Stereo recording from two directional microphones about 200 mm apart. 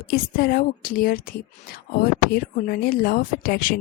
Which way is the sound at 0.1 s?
50° left (ahead or behind).